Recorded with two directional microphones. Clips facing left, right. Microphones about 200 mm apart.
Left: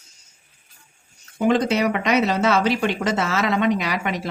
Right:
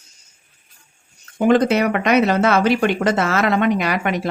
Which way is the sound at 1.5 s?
55° right (ahead or behind).